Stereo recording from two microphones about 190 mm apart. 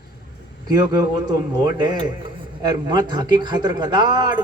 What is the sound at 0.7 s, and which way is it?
A man's voice, 20° right (ahead or behind).